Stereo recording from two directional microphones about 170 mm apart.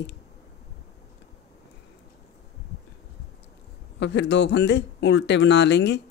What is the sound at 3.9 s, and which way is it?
Speech, 90° left.